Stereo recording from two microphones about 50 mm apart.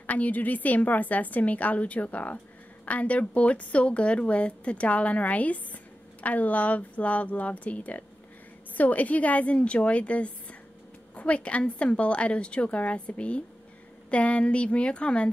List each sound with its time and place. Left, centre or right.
0.0 s a woman's voice: left